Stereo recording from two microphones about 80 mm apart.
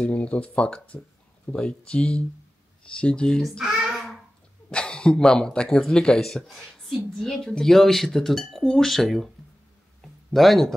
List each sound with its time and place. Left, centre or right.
0.0 s a child's voice: centre
4.6 s speech: centre
10.0 s a sound: centre